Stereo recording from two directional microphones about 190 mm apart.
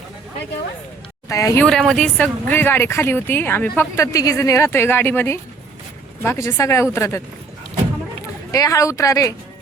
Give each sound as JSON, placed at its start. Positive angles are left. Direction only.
{"t": 1.3, "sound": "speech", "side_deg": 15}
{"t": 1.6, "sound": "speech", "side_deg": 0}
{"t": 8.5, "sound": "speech", "side_deg": 20}